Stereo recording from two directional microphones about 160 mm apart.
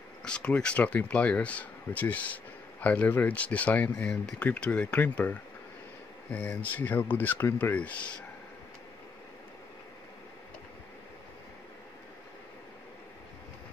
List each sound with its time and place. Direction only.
0.2 s speech: 5° left (ahead or behind)
6.6 s speech: 10° left (ahead or behind)